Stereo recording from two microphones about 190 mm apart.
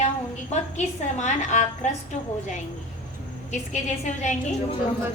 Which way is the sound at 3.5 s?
40° left (ahead or behind).